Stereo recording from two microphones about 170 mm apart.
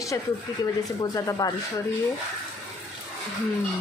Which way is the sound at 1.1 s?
20° left (ahead or behind).